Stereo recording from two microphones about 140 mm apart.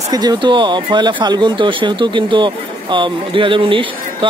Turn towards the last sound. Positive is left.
turn(degrees=-35)  # may be behind; listen again after turning